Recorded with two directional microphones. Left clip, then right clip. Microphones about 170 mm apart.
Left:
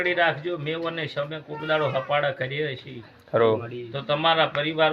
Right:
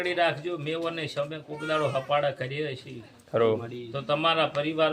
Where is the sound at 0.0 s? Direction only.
25° right (ahead or behind).